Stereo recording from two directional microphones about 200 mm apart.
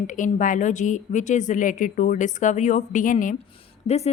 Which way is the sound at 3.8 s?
30° left (ahead or behind).